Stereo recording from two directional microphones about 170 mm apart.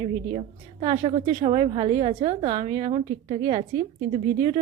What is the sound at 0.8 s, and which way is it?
A woman's voice, 35° right (ahead or behind).